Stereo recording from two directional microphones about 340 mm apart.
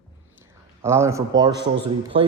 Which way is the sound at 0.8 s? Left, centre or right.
Centre.